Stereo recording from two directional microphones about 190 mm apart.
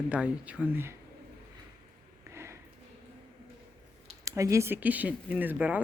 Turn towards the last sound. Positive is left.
turn(degrees=-10)  # may be behind; listen again after turning